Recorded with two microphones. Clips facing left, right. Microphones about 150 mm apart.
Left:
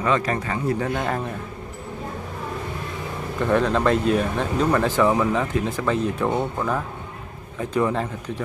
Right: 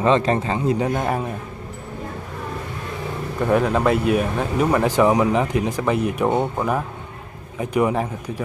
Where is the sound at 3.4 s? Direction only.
10° right (ahead or behind).